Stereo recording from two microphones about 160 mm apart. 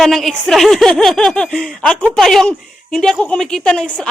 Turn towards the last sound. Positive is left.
turn(degrees=5)  # may be behind; listen again after turning